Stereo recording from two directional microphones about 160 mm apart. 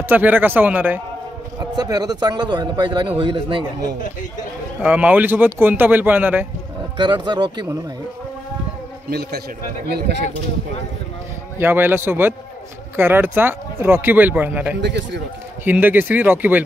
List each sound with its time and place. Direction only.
0.1 s speech: 10° right (ahead or behind)
1.6 s a man's voice: 25° right (ahead or behind)
4.8 s speech: 10° right (ahead or behind)
7.0 s a man's voice: 30° right (ahead or behind)
9.8 s speech: 80° right
11.5 s speech: 15° right (ahead or behind)
14.8 s a man's voice: 90° right
15.6 s speech: 10° right (ahead or behind)